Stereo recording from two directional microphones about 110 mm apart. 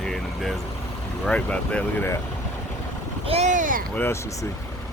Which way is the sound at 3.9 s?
20° left (ahead or behind).